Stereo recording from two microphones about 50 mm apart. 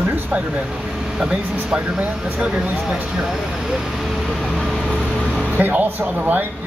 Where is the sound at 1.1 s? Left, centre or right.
Centre.